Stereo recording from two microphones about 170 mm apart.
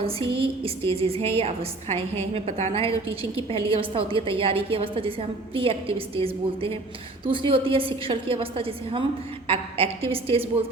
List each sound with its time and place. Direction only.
0.0 s a woman's voice: 35° right (ahead or behind)